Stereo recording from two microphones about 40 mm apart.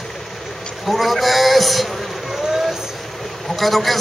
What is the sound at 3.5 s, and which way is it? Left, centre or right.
Speech, centre.